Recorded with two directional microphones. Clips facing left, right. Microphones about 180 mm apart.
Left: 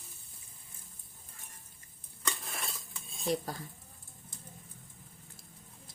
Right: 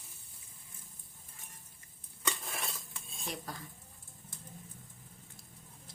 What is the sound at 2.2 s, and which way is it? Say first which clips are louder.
Dishes: right 1 dB; centre (ahead or behind).